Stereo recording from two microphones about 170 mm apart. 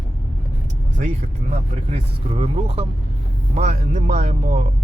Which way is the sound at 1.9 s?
35° right (ahead or behind).